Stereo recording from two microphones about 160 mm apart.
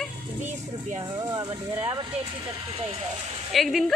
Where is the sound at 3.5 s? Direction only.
Centre (ahead or behind).